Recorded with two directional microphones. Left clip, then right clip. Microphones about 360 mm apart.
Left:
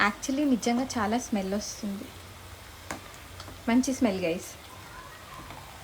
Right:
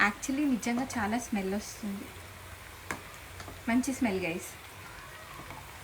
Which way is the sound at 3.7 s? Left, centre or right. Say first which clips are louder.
Left 4 dB; centre.